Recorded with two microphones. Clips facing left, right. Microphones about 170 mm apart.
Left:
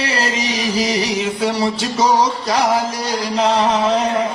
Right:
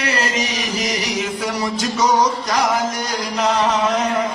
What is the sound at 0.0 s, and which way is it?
Music, 30° left (ahead or behind).